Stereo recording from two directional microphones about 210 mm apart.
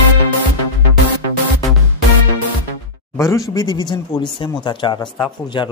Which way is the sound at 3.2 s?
15° left (ahead or behind).